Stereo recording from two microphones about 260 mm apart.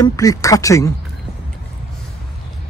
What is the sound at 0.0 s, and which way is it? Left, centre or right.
Speech, centre.